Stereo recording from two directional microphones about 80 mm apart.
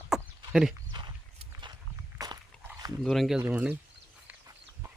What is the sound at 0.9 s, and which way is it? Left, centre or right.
Walk, right.